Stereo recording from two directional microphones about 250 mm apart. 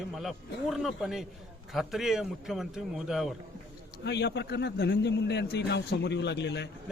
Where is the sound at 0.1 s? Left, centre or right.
Centre.